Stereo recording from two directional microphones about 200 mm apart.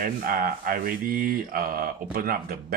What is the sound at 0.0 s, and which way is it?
Speech, 45° right (ahead or behind).